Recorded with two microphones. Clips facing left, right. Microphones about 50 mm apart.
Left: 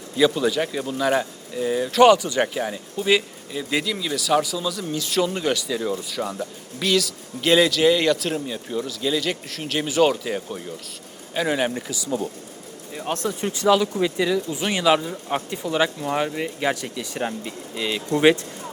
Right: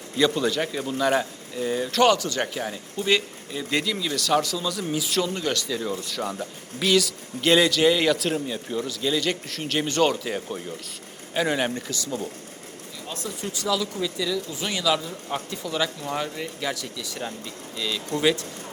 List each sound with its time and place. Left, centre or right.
0.2 s speech: centre
4.9 s speech: centre
5.2 s speech: centre
13.1 s speech: left
13.4 s speech: left